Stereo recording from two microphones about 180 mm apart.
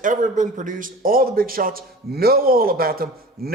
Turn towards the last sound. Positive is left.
turn(degrees=-55)  # may be behind; listen again after turning